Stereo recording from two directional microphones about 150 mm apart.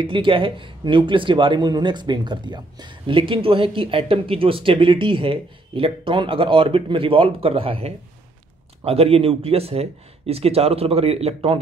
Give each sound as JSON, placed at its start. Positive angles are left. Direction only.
{"t": 0.0, "sound": "speech", "side_deg": -35}